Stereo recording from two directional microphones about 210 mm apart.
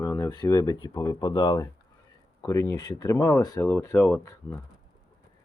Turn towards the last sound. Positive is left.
turn(degrees=15)  # may be behind; listen again after turning